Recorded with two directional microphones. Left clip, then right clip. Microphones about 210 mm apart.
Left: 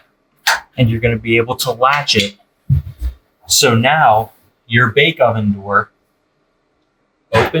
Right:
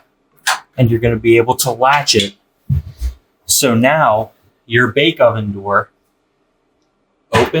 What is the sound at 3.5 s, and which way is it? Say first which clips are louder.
Speech: left 1 dB; 50° right (ahead or behind).